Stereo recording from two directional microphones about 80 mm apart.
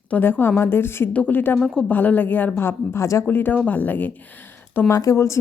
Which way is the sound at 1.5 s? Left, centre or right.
Centre.